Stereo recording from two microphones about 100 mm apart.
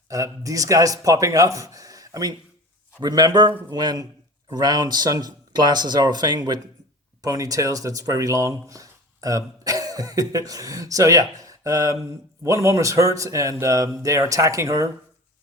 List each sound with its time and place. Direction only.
0.1 s speech: 35° right (ahead or behind)